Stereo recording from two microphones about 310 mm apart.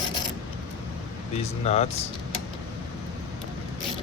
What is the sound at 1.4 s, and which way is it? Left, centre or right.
Speech, centre.